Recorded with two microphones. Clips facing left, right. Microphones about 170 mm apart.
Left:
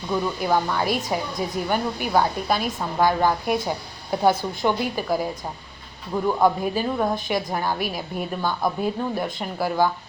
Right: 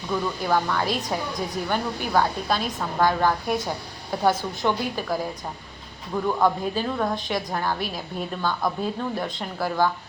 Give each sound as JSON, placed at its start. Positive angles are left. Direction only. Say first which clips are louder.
{"t": 0.1, "sound": "a woman's voice", "louder": "left 2 dB", "side_deg": 15}